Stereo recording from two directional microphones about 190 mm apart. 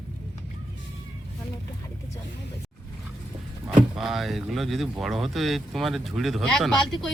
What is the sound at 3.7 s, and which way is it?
Speech, centre (ahead or behind).